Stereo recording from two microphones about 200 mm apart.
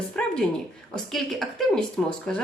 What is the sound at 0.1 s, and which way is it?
Speech, 5° left (ahead or behind).